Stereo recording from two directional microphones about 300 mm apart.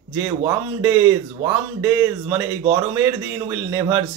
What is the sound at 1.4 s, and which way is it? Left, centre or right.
Speech, right.